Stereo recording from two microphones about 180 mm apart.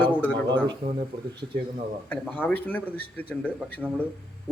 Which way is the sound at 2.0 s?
10° left (ahead or behind).